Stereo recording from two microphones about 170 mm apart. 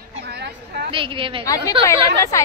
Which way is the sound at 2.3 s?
15° left (ahead or behind).